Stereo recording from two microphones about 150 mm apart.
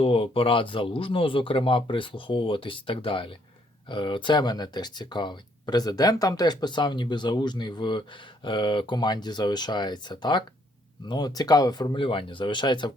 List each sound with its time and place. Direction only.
0.0 s speech: 40° left (ahead or behind)